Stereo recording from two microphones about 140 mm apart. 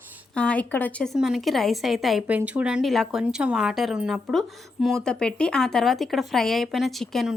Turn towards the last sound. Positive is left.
turn(degrees=0)  # may be behind; listen again after turning